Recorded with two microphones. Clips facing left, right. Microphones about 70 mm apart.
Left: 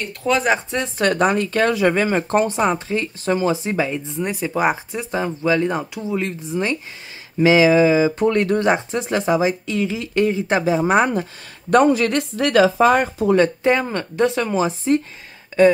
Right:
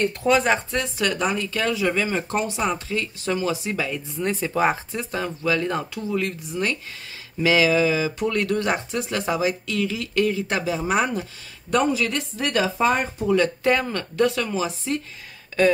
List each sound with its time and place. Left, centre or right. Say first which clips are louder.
0.3 s speech: left 2 dB; centre
0.7 s speech: left 2 dB; left
0.9 s speech: left 8 dB; left
4.2 s speech: left 1 dB; centre; by 11.1 s left
11.7 s speech: left 7 dB; left
13.7 s speech: left 3 dB; left